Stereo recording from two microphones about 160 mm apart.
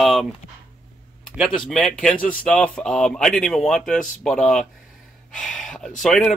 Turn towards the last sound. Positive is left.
turn(degrees=0)  # may be behind; listen again after turning